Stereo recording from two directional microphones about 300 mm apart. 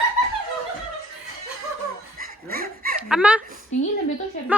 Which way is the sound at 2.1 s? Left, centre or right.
Right.